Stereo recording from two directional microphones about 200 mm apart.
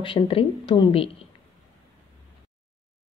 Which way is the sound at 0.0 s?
25° left (ahead or behind).